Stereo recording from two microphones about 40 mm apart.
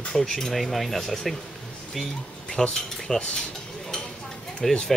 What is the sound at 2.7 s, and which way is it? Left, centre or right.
Speech, centre.